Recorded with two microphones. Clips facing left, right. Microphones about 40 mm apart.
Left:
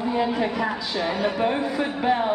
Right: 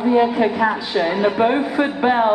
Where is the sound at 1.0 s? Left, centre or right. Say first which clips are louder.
Right 7 dB; right.